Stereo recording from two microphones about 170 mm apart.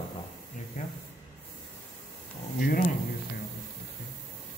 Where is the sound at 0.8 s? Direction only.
45° left (ahead or behind).